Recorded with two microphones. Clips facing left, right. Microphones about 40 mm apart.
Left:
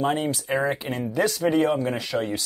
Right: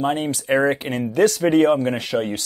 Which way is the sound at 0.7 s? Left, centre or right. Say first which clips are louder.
Right 6 dB; right.